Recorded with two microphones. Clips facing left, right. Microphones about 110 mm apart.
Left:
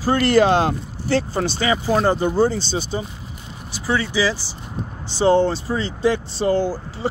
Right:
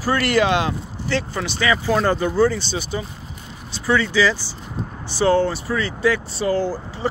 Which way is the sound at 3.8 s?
10° left (ahead or behind).